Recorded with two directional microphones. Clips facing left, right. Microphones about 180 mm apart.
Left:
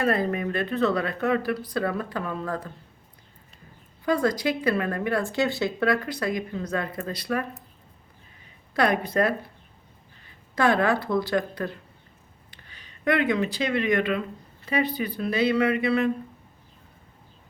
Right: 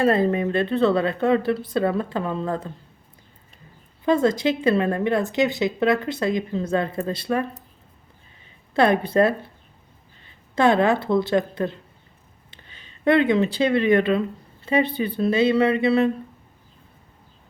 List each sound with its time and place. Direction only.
0.0 s a woman's voice: 25° right (ahead or behind)
4.0 s a woman's voice: 25° right (ahead or behind)
8.7 s a woman's voice: 25° right (ahead or behind)